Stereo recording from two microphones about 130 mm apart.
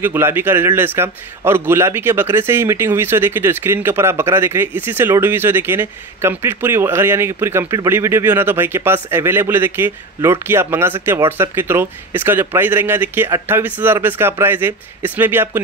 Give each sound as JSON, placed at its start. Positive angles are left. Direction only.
{"t": 0.0, "sound": "a man's voice", "side_deg": -15}